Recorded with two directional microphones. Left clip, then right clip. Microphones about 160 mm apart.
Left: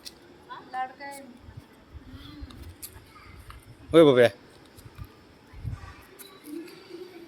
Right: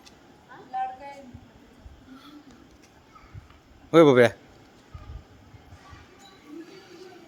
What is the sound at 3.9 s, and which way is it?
Speech, 30° right (ahead or behind).